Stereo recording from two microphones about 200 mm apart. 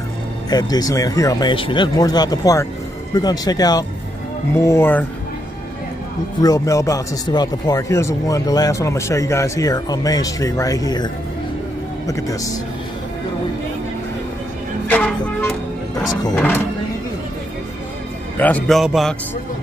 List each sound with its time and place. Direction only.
0.5 s speech: 20° left (ahead or behind)
6.4 s speech: 15° left (ahead or behind)
12.1 s speech: 15° left (ahead or behind)
14.9 s music: 5° left (ahead or behind)
16.3 s speech: 10° left (ahead or behind)
18.4 s a man's voice: 5° left (ahead or behind)